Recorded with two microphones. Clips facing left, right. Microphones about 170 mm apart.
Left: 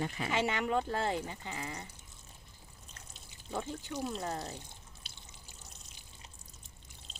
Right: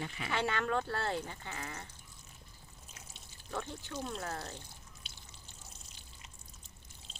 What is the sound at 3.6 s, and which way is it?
Speech, 15° left (ahead or behind).